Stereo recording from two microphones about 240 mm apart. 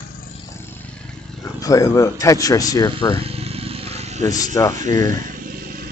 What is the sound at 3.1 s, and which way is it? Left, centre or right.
Motorcycle, right.